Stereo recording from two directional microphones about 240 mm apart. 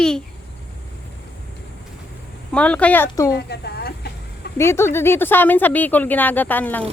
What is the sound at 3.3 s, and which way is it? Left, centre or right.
Speech, left.